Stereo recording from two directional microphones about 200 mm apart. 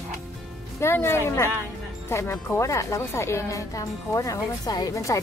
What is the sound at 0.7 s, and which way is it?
Speech, 10° left (ahead or behind).